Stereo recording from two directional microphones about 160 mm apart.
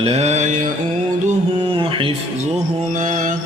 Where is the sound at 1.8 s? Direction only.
35° right (ahead or behind).